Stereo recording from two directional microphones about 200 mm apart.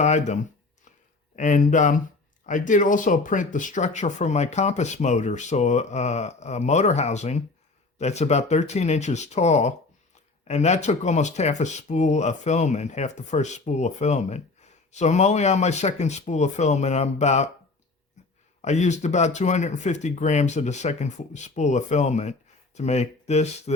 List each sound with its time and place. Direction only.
0.0 s speech: 35° left (ahead or behind)
1.4 s speech: 40° left (ahead or behind)
18.6 s speech: 35° left (ahead or behind)